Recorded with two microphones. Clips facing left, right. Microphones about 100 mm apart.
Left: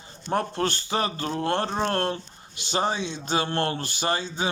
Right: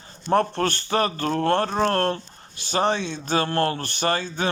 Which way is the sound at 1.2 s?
55° right (ahead or behind).